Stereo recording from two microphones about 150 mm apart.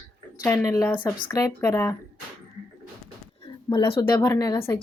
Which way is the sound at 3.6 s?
35° left (ahead or behind).